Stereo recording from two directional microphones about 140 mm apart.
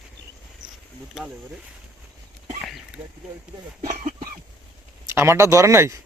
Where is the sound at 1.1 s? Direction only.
5° right (ahead or behind).